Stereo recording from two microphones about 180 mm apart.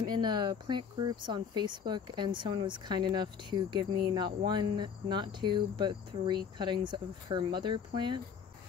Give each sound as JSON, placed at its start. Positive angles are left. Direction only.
{"t": 0.0, "sound": "speech", "side_deg": -25}